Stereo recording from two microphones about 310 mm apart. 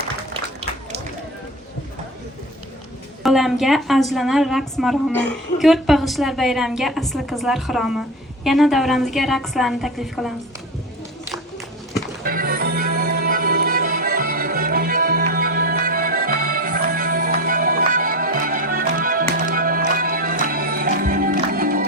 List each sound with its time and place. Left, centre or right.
3.2 s a woman's voice: centre
12.2 s music: right